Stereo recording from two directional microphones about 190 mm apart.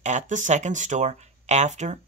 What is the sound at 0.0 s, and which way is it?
Speech, 40° right (ahead or behind).